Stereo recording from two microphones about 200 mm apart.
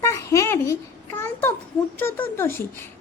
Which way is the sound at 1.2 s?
10° left (ahead or behind).